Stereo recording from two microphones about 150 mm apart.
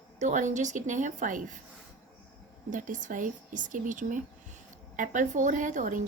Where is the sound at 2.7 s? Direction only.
60° right (ahead or behind).